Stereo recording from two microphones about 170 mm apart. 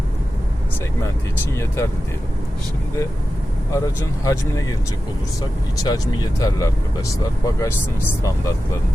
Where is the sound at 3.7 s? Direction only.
20° left (ahead or behind).